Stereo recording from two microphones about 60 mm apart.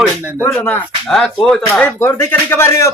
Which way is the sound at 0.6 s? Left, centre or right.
Left.